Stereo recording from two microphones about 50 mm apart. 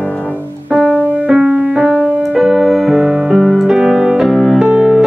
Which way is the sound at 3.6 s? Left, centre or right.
Centre.